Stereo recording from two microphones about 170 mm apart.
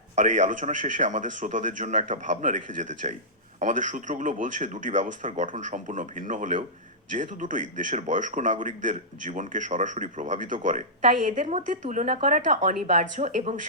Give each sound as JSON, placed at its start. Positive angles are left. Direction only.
{"t": 0.2, "sound": "a man's voice", "side_deg": -45}